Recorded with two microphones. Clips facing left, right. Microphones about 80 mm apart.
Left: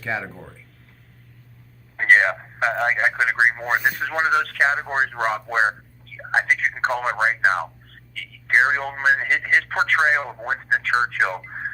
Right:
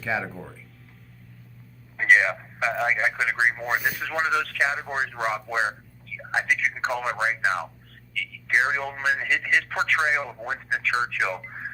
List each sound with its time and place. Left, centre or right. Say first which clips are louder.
0.0 s speech: even; centre
2.0 s radio: left 3 dB; left
3.8 s speech: left 6 dB; left
6.8 s speech: left 5 dB; left